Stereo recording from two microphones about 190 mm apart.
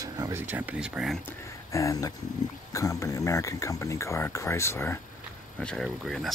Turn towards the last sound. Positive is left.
turn(degrees=0)  # may be behind; listen again after turning